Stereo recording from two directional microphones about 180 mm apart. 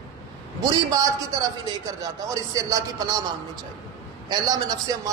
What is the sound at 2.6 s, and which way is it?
Speech, 20° right (ahead or behind).